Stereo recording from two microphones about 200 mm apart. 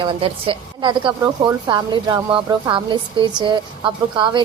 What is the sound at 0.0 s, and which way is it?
A woman's voice, 25° right (ahead or behind).